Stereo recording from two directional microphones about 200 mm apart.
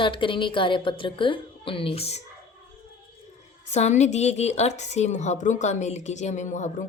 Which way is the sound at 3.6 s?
35° left (ahead or behind).